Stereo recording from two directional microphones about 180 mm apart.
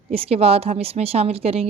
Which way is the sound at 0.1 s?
35° right (ahead or behind).